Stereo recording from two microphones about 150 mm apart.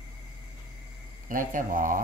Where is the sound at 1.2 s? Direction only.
65° right (ahead or behind).